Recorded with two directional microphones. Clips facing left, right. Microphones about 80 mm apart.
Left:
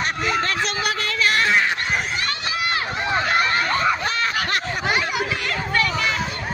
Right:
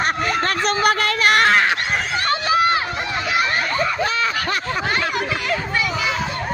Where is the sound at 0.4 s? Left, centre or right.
Right.